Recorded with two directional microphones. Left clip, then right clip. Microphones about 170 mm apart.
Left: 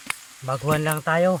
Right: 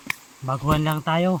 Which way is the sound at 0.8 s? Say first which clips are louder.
Left 2 dB; 20° left (ahead or behind).